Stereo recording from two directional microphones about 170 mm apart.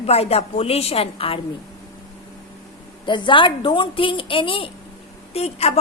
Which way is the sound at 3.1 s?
30° left (ahead or behind).